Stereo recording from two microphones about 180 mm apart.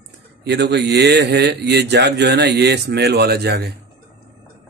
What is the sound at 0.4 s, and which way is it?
A man's voice, 70° right (ahead or behind).